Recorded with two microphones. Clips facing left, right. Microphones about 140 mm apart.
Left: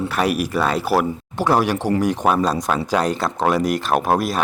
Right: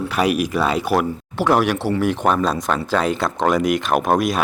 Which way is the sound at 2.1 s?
10° left (ahead or behind).